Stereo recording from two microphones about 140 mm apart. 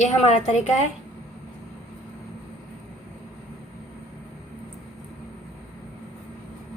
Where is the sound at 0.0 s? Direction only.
55° left (ahead or behind).